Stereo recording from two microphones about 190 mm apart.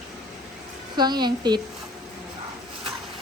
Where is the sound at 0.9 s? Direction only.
20° right (ahead or behind).